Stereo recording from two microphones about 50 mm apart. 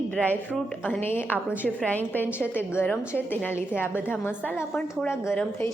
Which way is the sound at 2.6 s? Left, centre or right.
Left.